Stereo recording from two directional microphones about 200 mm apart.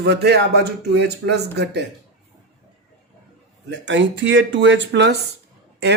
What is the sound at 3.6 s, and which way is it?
Speech, 60° right (ahead or behind).